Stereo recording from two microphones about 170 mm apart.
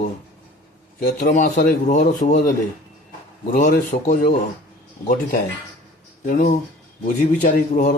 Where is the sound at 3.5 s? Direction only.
50° left (ahead or behind).